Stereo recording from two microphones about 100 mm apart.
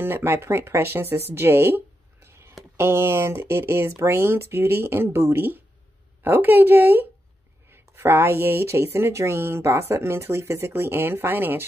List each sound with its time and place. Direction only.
0.0 s speech: 20° right (ahead or behind)